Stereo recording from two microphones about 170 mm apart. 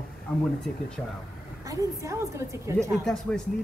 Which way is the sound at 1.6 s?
20° right (ahead or behind).